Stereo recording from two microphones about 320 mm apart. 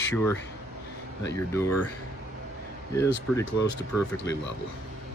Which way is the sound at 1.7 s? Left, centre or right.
Left.